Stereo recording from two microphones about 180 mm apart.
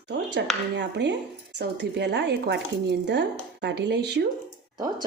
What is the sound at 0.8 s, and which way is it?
Speech, 80° right.